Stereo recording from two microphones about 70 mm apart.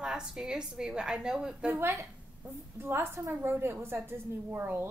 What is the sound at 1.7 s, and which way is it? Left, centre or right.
A woman's voice, right.